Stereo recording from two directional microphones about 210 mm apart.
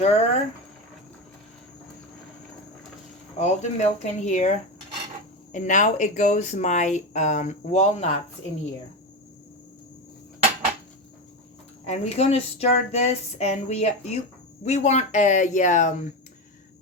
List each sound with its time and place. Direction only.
0.0 s speech: 30° left (ahead or behind)
3.3 s speech: 35° left (ahead or behind)
11.9 s speech: 30° left (ahead or behind)